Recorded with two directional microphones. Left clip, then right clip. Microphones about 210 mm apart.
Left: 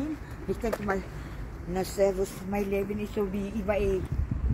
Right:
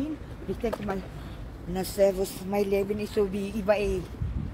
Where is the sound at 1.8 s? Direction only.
50° right (ahead or behind).